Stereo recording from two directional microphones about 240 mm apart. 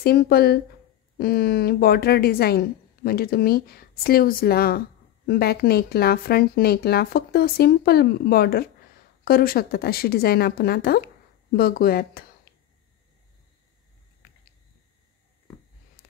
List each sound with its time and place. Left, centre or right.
0.0 s a woman's voice: left